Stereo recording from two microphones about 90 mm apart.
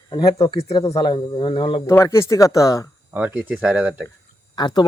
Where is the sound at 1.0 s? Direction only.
55° left (ahead or behind); by 1.8 s 70° left (ahead or behind).